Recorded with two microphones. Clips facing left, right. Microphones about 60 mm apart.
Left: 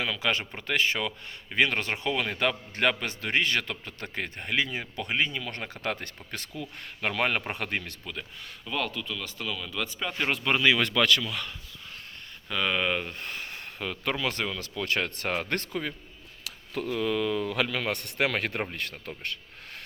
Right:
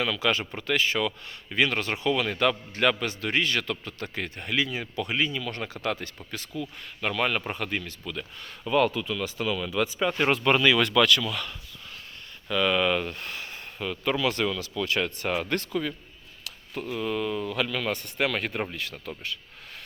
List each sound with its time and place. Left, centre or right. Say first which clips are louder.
0.0 s a man's voice: right 3 dB; centre; by 7.9 s left
8.1 s a man's voice: right 3 dB; left
8.6 s speech: right 8 dB; centre
10.6 s a man's voice: right 2 dB; centre
10.8 s speech: right 3 dB; left
11.2 s a man's voice: right 3 dB; centre
13.2 s speech: even; left
13.5 s a sound: right 2 dB; left
14.2 s speech: right 4 dB; left
15.7 s a man's voice: right 3 dB; left
17.0 s speech: left 1 dB; left
17.4 s a man's voice: even; left